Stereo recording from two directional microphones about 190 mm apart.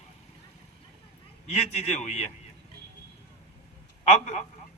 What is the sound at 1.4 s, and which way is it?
Speech, 35° left (ahead or behind).